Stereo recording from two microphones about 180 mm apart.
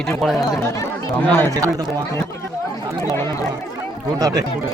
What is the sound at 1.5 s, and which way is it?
Speech, 20° right (ahead or behind).